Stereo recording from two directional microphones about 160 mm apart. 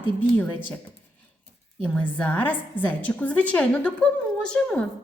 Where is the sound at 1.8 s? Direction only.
10° left (ahead or behind).